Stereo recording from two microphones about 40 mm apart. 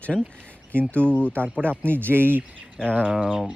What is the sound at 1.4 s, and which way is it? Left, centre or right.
Speech, right.